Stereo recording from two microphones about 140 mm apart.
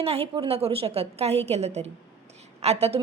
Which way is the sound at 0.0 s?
45° right (ahead or behind).